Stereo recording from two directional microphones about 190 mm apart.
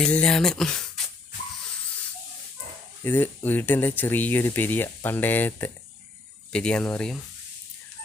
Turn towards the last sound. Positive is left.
turn(degrees=5)  # may be behind; listen again after turning